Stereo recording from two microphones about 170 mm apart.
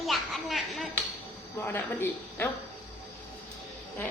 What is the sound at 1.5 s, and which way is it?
Speech, 15° left (ahead or behind).